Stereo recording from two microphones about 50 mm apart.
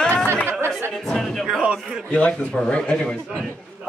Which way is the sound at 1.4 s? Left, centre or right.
Centre.